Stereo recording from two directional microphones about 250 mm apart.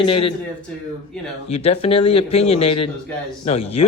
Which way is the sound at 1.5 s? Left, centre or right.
Left.